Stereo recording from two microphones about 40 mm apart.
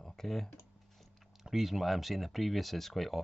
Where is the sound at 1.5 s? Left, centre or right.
Centre.